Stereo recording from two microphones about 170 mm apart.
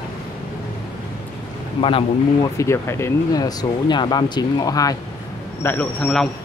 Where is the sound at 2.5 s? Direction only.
15° left (ahead or behind).